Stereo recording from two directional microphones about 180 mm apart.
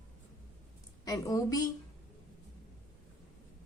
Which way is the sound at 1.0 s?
20° left (ahead or behind).